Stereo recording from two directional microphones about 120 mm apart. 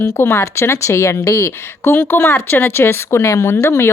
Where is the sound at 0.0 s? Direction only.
20° left (ahead or behind).